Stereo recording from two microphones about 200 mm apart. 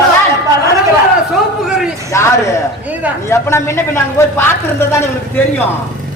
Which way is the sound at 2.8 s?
5° right (ahead or behind).